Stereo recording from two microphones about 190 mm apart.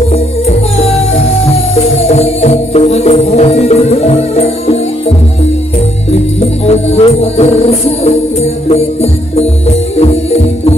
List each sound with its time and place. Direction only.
0.7 s music: 35° left (ahead or behind)
6.6 s music: 35° left (ahead or behind)